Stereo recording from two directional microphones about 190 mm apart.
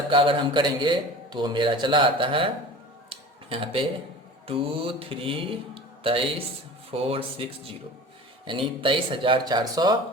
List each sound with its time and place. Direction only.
0.1 s a man's voice: 25° right (ahead or behind)
3.1 s a sound: 30° right (ahead or behind)
4.4 s a man's voice: 30° right (ahead or behind)